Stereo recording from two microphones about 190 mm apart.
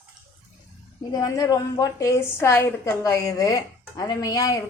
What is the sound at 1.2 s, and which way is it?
A woman's voice, 20° left (ahead or behind).